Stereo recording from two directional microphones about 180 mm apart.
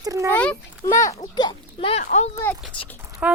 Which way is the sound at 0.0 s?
20° right (ahead or behind).